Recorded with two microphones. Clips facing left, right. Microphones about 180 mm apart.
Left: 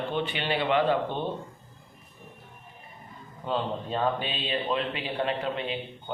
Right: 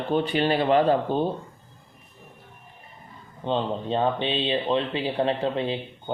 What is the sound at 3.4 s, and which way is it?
Speech, 25° right (ahead or behind).